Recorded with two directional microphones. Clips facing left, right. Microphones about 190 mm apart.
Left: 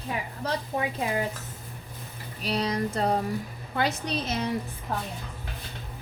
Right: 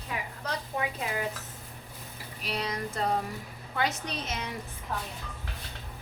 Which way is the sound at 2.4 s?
35° left (ahead or behind).